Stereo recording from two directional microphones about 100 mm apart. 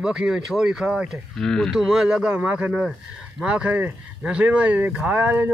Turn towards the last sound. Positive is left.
turn(degrees=-15)  # may be behind; listen again after turning